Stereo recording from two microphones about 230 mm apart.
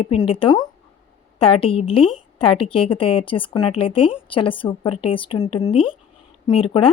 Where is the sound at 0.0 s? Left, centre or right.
Left.